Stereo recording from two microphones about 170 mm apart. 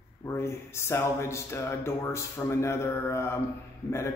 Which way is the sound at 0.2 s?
15° left (ahead or behind).